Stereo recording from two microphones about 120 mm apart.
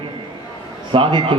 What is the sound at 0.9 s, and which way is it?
Speech, 40° right (ahead or behind).